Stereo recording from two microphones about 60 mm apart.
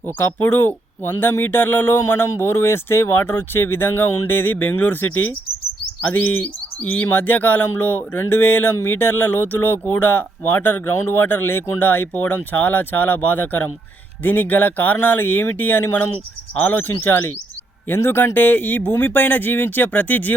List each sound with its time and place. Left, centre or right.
0.0 s speech: left
6.7 s speech: left